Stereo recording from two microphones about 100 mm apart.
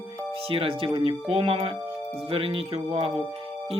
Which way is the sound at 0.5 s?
65° right (ahead or behind).